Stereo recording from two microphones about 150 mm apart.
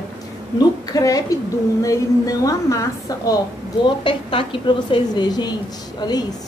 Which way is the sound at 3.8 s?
35° left (ahead or behind).